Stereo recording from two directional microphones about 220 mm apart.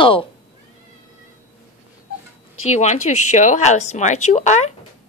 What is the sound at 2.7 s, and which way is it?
Speech, 30° left (ahead or behind).